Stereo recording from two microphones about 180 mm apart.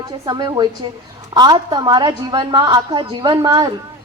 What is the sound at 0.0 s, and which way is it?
A woman's voice, 20° right (ahead or behind).